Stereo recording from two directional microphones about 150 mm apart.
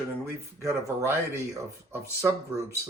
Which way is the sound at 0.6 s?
20° right (ahead or behind).